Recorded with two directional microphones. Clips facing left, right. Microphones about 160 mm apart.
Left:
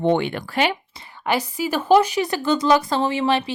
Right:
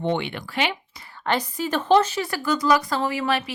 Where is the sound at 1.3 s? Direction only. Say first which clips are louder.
Left 2 dB; 10° left (ahead or behind).